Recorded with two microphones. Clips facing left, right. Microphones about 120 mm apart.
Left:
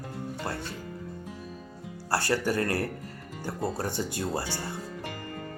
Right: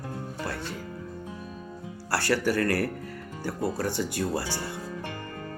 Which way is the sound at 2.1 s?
20° left (ahead or behind).